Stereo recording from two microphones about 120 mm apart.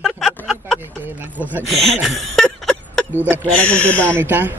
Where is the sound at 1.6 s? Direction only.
Centre (ahead or behind).